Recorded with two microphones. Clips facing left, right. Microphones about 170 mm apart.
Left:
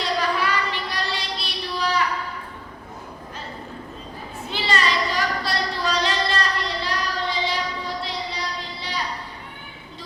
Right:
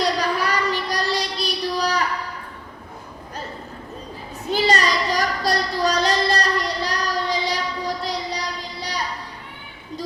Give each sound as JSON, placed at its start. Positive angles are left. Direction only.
{"t": 0.0, "sound": "child singing", "side_deg": -40}
{"t": 4.5, "sound": "child singing", "side_deg": -40}